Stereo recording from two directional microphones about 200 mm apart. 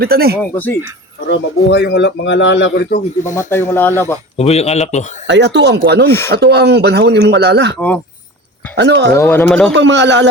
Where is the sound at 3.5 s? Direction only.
10° left (ahead or behind).